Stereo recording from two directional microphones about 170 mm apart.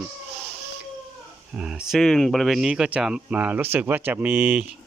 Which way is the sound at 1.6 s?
5° right (ahead or behind).